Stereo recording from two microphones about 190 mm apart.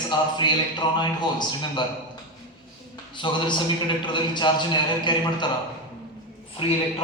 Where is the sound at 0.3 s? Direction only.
25° left (ahead or behind).